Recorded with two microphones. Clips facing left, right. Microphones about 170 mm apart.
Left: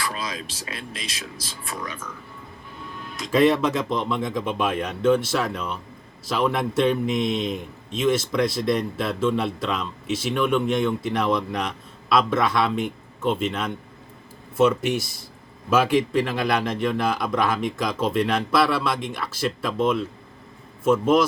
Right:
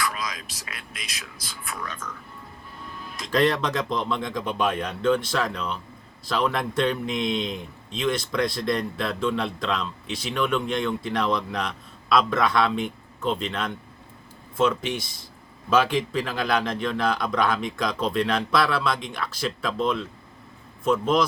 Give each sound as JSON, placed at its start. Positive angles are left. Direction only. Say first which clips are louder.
{"t": 0.0, "sound": "speech", "louder": "even", "side_deg": 30}
{"t": 3.1, "sound": "a man's voice", "louder": "left 4 dB", "side_deg": 0}